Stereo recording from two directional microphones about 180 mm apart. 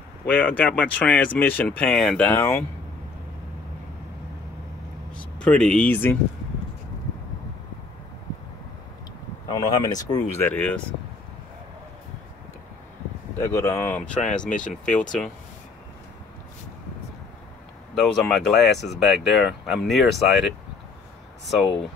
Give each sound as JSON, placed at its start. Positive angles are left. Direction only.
{"t": 0.3, "sound": "speech", "side_deg": 10}
{"t": 5.1, "sound": "speech", "side_deg": 5}
{"t": 9.5, "sound": "speech", "side_deg": 25}
{"t": 10.4, "sound": "speech", "side_deg": 10}
{"t": 13.4, "sound": "speech", "side_deg": 15}
{"t": 17.9, "sound": "speech", "side_deg": 0}